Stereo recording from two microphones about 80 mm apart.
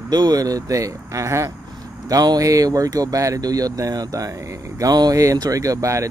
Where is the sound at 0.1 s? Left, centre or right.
Right.